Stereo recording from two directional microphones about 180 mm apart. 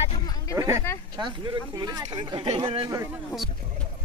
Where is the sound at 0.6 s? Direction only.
15° right (ahead or behind).